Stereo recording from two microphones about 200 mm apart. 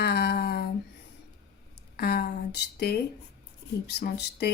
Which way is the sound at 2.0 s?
50° left (ahead or behind).